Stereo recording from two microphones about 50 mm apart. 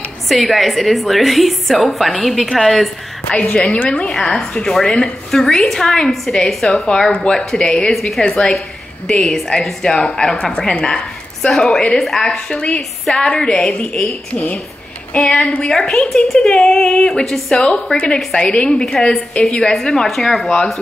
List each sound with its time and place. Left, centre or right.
0.3 s a woman's voice: centre
3.3 s a woman's voice: left
4.4 s a woman's voice: centre
7.5 s a woman's voice: centre
7.9 s a woman's voice: centre
8.5 s a sound: centre
9.5 s a woman's voice: centre
13.7 s a woman's voice: left
15.1 s a woman's voice: centre
19.4 s a woman's voice: left
19.8 s a woman's voice: centre